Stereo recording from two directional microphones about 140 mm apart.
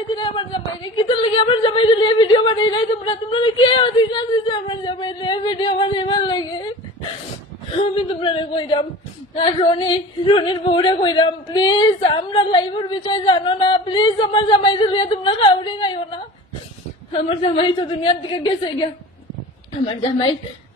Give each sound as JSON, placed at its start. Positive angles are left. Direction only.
{"t": 0.1, "sound": "a woman's voice", "side_deg": 35}
{"t": 7.9, "sound": "a woman's voice", "side_deg": 40}
{"t": 17.1, "sound": "a woman's voice", "side_deg": 45}